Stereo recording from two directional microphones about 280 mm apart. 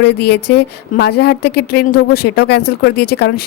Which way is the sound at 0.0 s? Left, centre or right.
Left.